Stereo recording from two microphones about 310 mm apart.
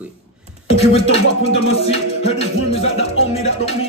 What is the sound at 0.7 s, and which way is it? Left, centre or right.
Speech, centre.